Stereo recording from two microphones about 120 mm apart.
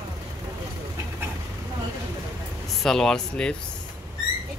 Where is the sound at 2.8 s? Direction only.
5° left (ahead or behind).